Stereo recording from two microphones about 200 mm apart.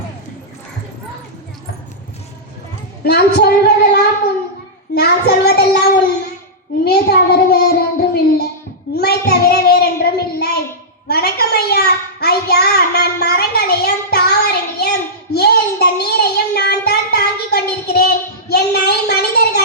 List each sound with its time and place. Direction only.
3.0 s a woman's voice: 55° left (ahead or behind)
4.9 s child singing: 55° left (ahead or behind)
6.8 s child singing: 50° left (ahead or behind)
9.0 s a sound: 50° left (ahead or behind)
15.3 s child singing: 55° left (ahead or behind)
18.4 s a sound: 55° left (ahead or behind)